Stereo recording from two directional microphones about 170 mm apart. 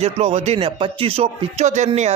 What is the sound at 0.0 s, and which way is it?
Speech, 40° right (ahead or behind).